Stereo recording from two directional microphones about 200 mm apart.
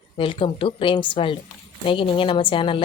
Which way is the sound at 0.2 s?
25° left (ahead or behind).